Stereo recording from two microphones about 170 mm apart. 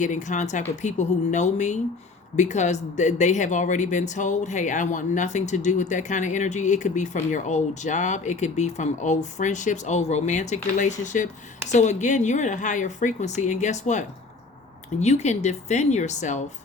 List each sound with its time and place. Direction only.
0.0 s speech: 45° left (ahead or behind)
15.0 s a woman's voice: 40° left (ahead or behind)